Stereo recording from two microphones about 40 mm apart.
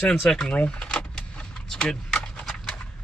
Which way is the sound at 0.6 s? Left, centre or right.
Left.